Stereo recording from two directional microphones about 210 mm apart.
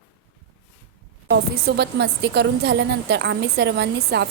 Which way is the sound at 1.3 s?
50° right (ahead or behind).